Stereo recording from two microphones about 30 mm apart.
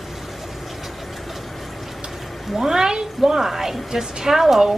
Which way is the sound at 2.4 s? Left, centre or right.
Centre.